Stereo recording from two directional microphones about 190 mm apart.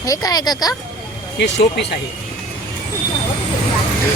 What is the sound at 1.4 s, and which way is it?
Speech, 65° left (ahead or behind).